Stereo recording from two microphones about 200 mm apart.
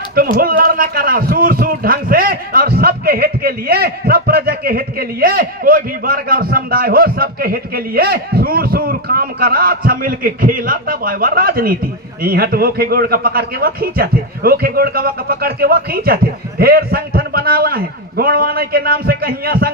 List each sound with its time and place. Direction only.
0.2 s speech: 45° right (ahead or behind)